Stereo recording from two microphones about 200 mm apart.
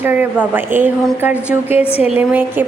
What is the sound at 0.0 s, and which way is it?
A woman's voice, 10° right (ahead or behind).